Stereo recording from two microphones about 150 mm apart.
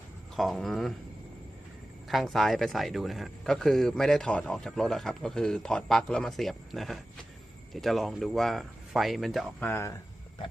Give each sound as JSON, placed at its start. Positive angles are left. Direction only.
{"t": 0.3, "sound": "speech", "side_deg": 0}
{"t": 2.0, "sound": "speech", "side_deg": 0}
{"t": 9.6, "sound": "speech", "side_deg": 15}